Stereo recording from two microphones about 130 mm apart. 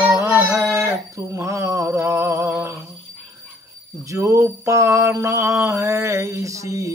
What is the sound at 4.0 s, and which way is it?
Mantra, 25° right (ahead or behind).